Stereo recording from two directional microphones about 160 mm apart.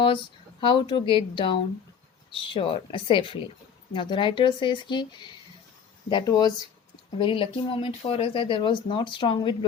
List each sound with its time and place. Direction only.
0.6 s speech: 30° left (ahead or behind)